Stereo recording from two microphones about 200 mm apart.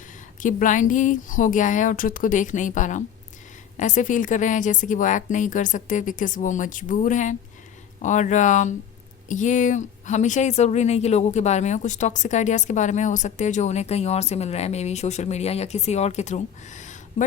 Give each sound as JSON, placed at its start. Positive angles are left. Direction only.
{"t": 0.3, "sound": "speech", "side_deg": 40}